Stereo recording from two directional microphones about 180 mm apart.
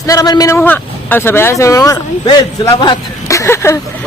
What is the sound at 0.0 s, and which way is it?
A man's voice, 20° left (ahead or behind).